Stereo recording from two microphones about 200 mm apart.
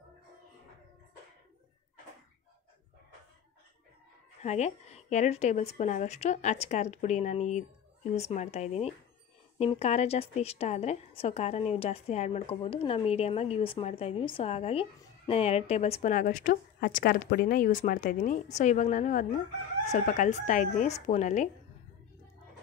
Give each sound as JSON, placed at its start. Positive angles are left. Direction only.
{"t": 4.4, "sound": "a woman's voice", "side_deg": 35}